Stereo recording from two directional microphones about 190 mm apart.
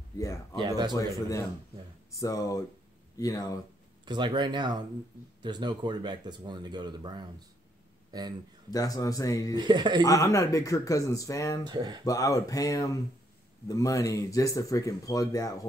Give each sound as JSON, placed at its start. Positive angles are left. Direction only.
{"t": 0.2, "sound": "speech", "side_deg": 15}
{"t": 0.6, "sound": "speech", "side_deg": -20}
{"t": 2.1, "sound": "speech", "side_deg": 20}
{"t": 4.0, "sound": "speech", "side_deg": -25}
{"t": 8.6, "sound": "speech", "side_deg": 20}
{"t": 9.5, "sound": "speech", "side_deg": -25}
{"t": 10.0, "sound": "speech", "side_deg": 20}
{"t": 11.6, "sound": "speech", "side_deg": -20}
{"t": 12.0, "sound": "speech", "side_deg": 20}